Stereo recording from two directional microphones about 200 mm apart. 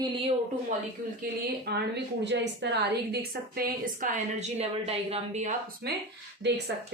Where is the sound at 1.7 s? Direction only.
60° right (ahead or behind).